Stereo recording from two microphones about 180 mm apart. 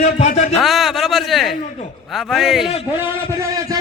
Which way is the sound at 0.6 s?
Centre (ahead or behind).